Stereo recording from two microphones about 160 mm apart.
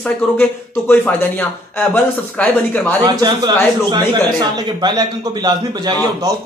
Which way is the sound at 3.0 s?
25° right (ahead or behind).